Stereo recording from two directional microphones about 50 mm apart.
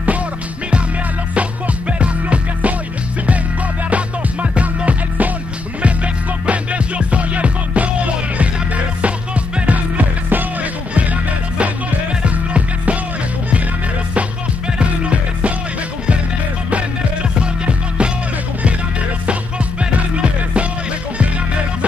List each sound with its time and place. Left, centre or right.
1.3 s music: right
3.9 s music: right
6.4 s music: right
14.8 s music: right
16.7 s music: right